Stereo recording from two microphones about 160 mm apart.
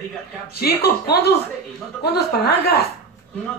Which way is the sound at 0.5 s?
80° left.